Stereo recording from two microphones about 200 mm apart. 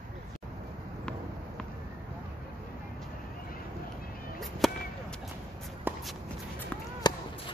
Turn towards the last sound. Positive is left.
turn(degrees=20)  # may be behind; listen again after turning